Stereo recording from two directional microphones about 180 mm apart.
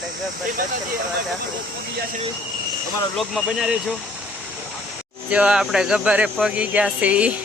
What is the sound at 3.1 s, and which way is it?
Speech, centre (ahead or behind).